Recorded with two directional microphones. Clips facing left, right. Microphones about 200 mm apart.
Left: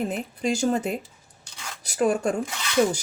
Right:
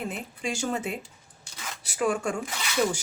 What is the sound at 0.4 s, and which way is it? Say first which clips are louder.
Speech: left 6 dB; 40° left (ahead or behind).